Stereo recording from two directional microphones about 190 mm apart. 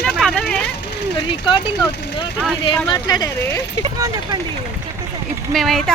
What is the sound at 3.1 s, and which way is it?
Speech, 20° left (ahead or behind).